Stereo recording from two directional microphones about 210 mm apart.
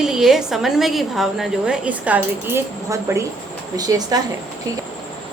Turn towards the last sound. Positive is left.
turn(degrees=-15)  # may be behind; listen again after turning